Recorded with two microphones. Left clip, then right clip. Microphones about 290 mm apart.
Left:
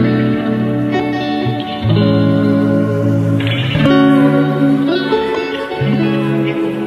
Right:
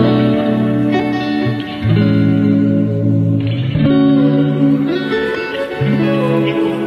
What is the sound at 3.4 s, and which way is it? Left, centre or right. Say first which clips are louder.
Music: left 4 dB; left.